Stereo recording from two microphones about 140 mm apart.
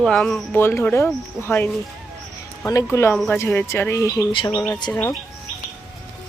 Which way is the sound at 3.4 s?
15° left (ahead or behind).